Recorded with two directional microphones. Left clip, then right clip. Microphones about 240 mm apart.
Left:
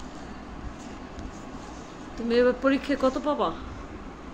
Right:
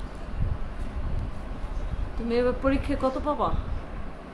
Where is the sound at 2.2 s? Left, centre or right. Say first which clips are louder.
Left 3 dB; centre.